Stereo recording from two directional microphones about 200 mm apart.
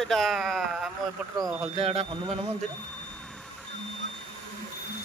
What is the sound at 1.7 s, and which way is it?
Speech, 30° right (ahead or behind).